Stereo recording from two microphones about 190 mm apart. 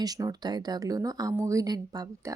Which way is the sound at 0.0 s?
20° right (ahead or behind).